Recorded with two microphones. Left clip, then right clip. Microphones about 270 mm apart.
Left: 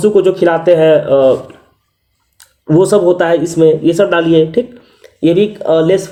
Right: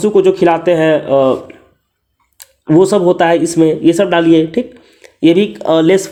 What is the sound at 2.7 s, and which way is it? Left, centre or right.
Speech, right.